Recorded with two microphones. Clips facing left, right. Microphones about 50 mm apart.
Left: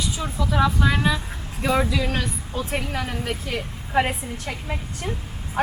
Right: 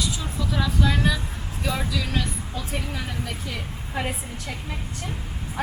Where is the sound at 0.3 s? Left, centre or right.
Centre; by 4.5 s left.